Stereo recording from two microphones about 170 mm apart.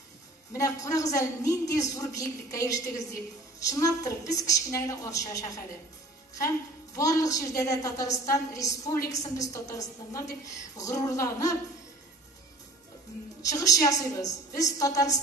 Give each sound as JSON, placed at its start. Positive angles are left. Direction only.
{"t": 0.8, "sound": "a woman's voice", "side_deg": 20}
{"t": 13.4, "sound": "a woman's voice", "side_deg": 20}